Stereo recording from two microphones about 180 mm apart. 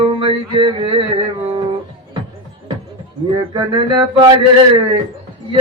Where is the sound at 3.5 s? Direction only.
25° right (ahead or behind).